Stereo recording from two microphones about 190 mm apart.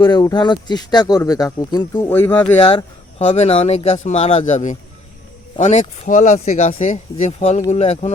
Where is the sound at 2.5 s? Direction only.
30° left (ahead or behind).